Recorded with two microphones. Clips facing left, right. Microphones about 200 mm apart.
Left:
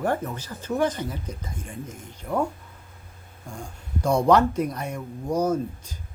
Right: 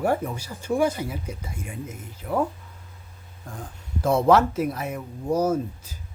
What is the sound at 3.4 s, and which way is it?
Speech, centre (ahead or behind).